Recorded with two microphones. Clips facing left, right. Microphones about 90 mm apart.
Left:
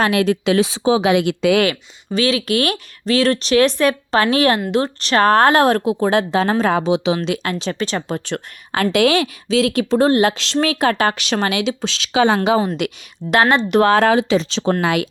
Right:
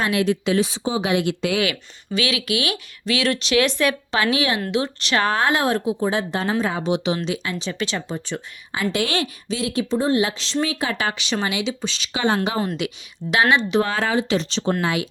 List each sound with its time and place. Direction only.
0.0 s speech: 65° left (ahead or behind); by 1.6 s 90° left
2.1 s speech: 35° left (ahead or behind); by 7.8 s 65° left (ahead or behind)
7.8 s speech: 40° left (ahead or behind)
8.0 s speech: 90° left
10.2 s speech: 70° left (ahead or behind); by 12.4 s 90° left
12.8 s speech: 60° left (ahead or behind)
13.3 s speech: 40° left (ahead or behind)
13.7 s speech: 70° left (ahead or behind)